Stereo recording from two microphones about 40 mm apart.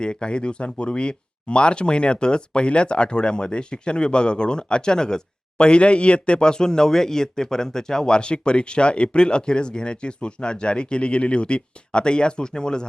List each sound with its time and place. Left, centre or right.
0.0 s speech: left